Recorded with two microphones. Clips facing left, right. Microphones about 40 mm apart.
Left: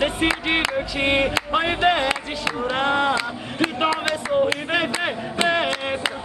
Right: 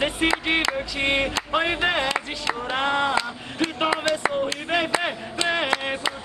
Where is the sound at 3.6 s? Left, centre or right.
Centre.